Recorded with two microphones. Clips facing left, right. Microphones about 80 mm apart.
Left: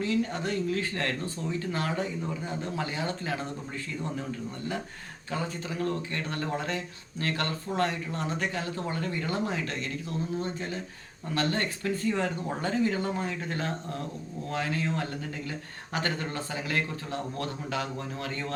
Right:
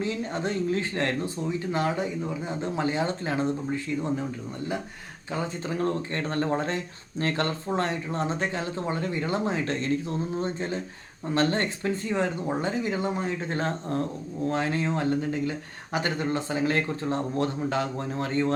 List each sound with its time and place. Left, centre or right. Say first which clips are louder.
0.0 s speech: even; right
5.3 s speech: right 3 dB; right